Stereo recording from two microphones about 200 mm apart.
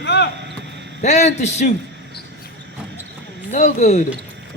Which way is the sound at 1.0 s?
35° left (ahead or behind).